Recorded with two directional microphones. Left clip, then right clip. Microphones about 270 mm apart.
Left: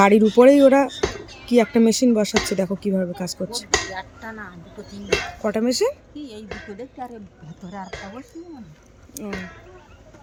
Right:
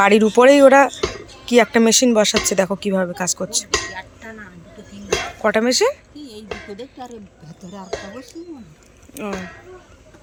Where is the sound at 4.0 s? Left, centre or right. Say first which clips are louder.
Left 1 dB; centre.